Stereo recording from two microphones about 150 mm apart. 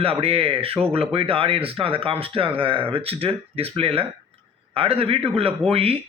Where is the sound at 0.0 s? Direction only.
40° right (ahead or behind).